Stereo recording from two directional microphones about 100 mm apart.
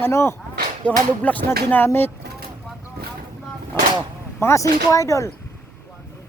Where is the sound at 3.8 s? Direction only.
20° left (ahead or behind).